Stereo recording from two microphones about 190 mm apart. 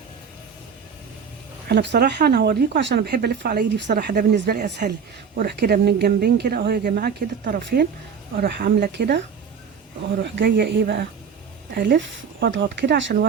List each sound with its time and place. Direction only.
1.7 s speech: 60° right (ahead or behind)
10.2 s speech: 60° right (ahead or behind)
11.7 s speech: 50° right (ahead or behind)
11.9 s speech: 75° right (ahead or behind)